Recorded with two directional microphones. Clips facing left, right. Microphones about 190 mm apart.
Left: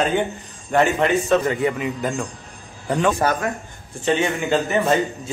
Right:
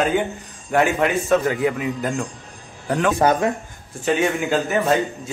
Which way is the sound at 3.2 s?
20° right (ahead or behind).